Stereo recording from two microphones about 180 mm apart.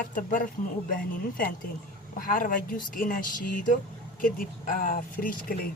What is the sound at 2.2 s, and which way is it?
Speech, 50° left (ahead or behind).